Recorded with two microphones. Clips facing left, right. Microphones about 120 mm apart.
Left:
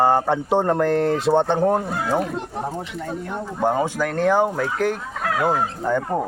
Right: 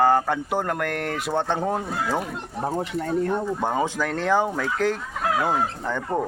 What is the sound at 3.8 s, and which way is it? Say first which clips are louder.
Speech: left 4 dB; 10° left (ahead or behind).